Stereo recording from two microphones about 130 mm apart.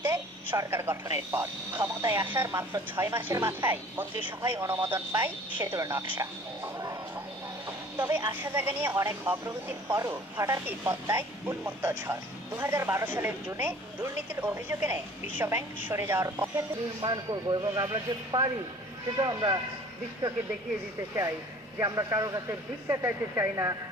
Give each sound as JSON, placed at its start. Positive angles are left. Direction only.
{"t": 0.0, "sound": "a woman's voice", "side_deg": -20}
{"t": 7.9, "sound": "a woman's voice", "side_deg": -15}
{"t": 17.0, "sound": "a man's voice", "side_deg": -35}
{"t": 21.8, "sound": "a woman's voice", "side_deg": -25}